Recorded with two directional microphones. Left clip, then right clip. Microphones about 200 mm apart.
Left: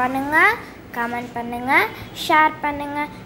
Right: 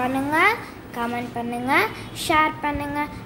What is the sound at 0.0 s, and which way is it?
A child's voice, centre (ahead or behind).